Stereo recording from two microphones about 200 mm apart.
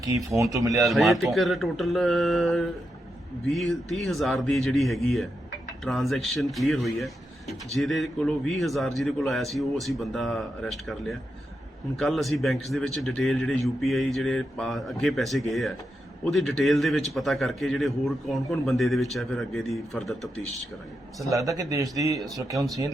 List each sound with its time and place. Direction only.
0.5 s speech: 15° right (ahead or behind)
0.9 s speech: centre (ahead or behind)
21.2 s speech: 15° right (ahead or behind)